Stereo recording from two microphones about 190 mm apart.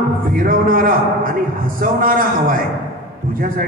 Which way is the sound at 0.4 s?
50° right (ahead or behind).